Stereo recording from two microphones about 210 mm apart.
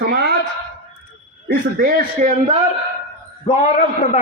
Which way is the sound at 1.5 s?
45° right (ahead or behind).